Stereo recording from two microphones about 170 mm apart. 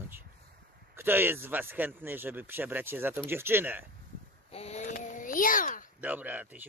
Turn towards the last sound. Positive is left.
turn(degrees=-10)  # may be behind; listen again after turning